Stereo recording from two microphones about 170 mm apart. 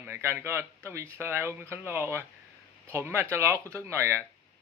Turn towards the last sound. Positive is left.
turn(degrees=-15)  # may be behind; listen again after turning